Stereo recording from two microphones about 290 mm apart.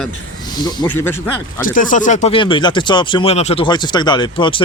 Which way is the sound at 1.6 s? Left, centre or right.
Left.